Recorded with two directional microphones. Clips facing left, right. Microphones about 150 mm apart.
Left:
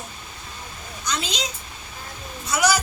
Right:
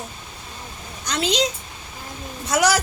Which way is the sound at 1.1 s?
90° right.